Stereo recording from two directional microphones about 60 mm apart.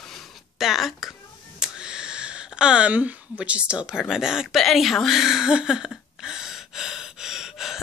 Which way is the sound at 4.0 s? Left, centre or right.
Centre.